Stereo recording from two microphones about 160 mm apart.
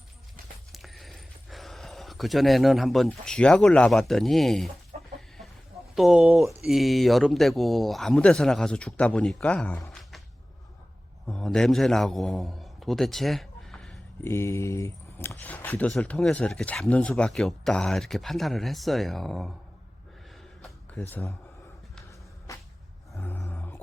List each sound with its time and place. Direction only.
0.7 s speech: centre (ahead or behind)
4.9 s chicken: 50° right (ahead or behind)
5.9 s speech: centre (ahead or behind)
9.9 s a sound: centre (ahead or behind)
11.3 s a man's voice: 5° left (ahead or behind)
14.3 s speech: 15° left (ahead or behind); by 19.5 s centre (ahead or behind)
20.6 s a sound: centre (ahead or behind)
22.5 s a sound: 20° left (ahead or behind)
23.1 s roar: 15° left (ahead or behind)